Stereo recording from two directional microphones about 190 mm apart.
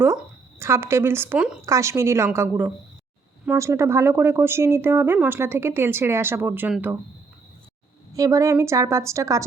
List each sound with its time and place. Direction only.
0.6 s speech: 15° right (ahead or behind)
8.1 s speech: 15° right (ahead or behind)